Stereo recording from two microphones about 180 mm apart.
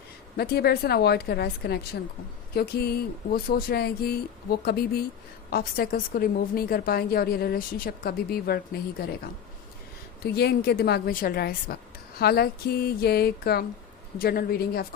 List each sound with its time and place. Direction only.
0.3 s a woman's voice: 60° left (ahead or behind)
10.3 s a woman's voice: 60° left (ahead or behind)